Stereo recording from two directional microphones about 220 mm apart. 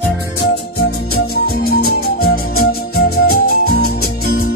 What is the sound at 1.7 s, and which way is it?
Music, 45° left (ahead or behind).